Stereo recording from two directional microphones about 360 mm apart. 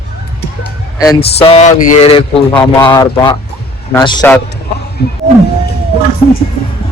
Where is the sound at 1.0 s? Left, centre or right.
Centre.